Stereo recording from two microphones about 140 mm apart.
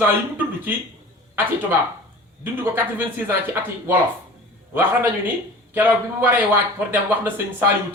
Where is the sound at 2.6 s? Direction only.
15° right (ahead or behind).